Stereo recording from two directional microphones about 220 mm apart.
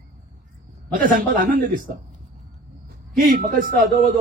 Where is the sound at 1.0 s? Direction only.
40° right (ahead or behind).